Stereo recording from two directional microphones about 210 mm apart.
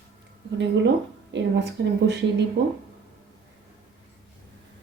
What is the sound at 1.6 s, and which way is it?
Speech, 55° right (ahead or behind).